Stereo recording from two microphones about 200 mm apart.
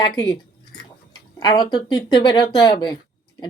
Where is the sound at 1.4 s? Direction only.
20° left (ahead or behind).